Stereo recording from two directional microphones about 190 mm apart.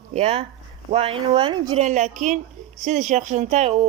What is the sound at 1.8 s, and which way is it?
Speech, 40° right (ahead or behind).